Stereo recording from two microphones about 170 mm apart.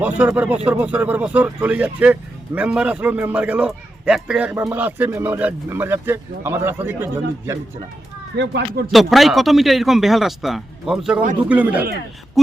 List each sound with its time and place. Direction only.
0.0 s a man's voice: 10° right (ahead or behind)
8.4 s speech: 80° right
8.9 s a man's voice: centre (ahead or behind)